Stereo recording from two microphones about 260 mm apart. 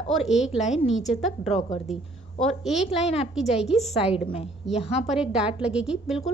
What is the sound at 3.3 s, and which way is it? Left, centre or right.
Speech, centre.